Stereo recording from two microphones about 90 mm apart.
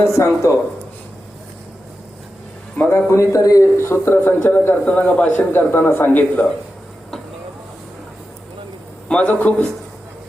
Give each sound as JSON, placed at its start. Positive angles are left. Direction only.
{"t": 0.0, "sound": "a man's voice", "side_deg": 35}
{"t": 2.7, "sound": "a man's voice", "side_deg": 15}
{"t": 3.1, "sound": "a man's voice", "side_deg": 35}
{"t": 3.8, "sound": "a man's voice", "side_deg": 30}
{"t": 9.0, "sound": "a man's voice", "side_deg": 15}